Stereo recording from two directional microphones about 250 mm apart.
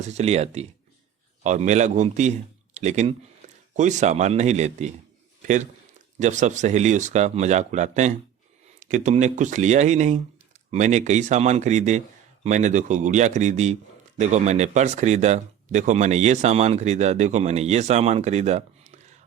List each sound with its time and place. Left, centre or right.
0.0 s a man's voice: right